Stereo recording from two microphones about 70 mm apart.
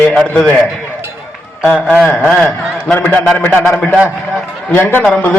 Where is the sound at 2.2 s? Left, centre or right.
Centre.